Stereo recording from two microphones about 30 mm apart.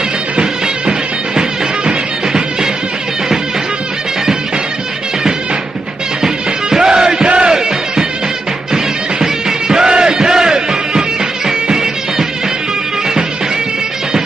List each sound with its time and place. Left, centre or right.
1.9 s music: right
6.2 s music: centre
7.3 s battle cry: right
7.5 s music: right
9.2 s music: right